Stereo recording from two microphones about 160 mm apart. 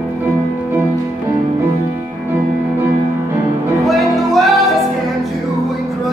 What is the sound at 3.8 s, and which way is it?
Music, centre (ahead or behind).